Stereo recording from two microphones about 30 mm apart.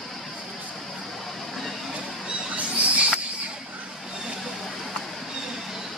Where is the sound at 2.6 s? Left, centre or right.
Right.